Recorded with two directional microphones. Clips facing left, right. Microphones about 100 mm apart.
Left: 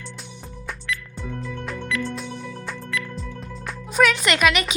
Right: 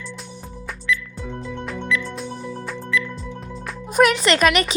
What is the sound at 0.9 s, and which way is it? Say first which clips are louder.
Music: right 7 dB; 55° left (ahead or behind).